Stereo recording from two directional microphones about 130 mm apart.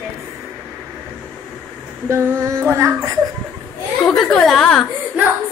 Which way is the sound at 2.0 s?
20° right (ahead or behind).